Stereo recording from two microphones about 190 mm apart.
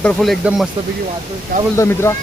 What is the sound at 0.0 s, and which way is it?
Speech, 5° left (ahead or behind).